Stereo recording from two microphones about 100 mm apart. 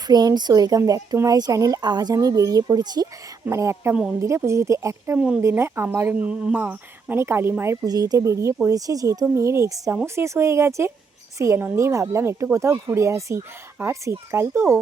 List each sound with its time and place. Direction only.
0.1 s speech: 45° right (ahead or behind)
3.4 s speech: 30° right (ahead or behind)
5.1 s speech: 10° right (ahead or behind)
5.4 s speech: 25° right (ahead or behind)
7.9 s speech: 40° right (ahead or behind)